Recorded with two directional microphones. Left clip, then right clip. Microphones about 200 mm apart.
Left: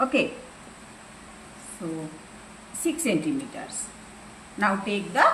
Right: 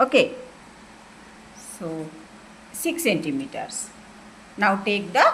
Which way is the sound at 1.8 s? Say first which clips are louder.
Right 2 dB; 45° right (ahead or behind).